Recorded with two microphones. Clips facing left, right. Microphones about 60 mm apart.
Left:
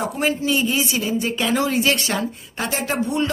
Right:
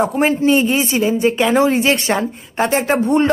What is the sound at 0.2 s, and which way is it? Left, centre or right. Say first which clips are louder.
A man's voice: right 5 dB; right.